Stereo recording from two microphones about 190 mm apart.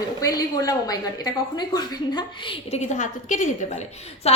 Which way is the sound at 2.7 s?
40° left (ahead or behind).